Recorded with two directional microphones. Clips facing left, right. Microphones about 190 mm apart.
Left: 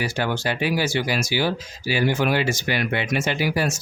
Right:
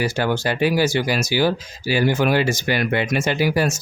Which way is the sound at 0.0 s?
40° right (ahead or behind).